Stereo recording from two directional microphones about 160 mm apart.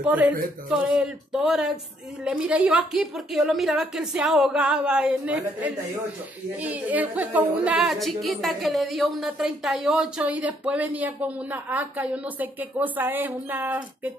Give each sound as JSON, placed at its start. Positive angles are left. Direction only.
{"t": 0.0, "sound": "a woman's voice", "side_deg": -10}